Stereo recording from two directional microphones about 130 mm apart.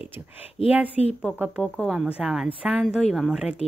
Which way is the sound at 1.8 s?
5° right (ahead or behind).